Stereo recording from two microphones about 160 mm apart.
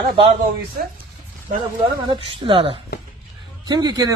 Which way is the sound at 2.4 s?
35° right (ahead or behind).